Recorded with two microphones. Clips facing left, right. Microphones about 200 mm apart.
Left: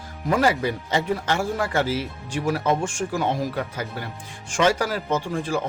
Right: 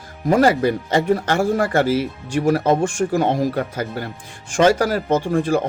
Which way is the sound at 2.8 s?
55° right (ahead or behind).